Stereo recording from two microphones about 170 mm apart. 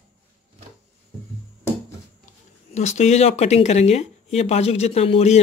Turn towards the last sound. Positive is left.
turn(degrees=35)  # may be behind; listen again after turning